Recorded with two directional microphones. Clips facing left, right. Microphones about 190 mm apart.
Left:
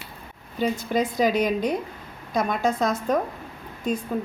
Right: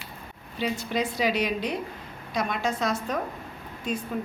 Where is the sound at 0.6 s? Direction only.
45° left (ahead or behind).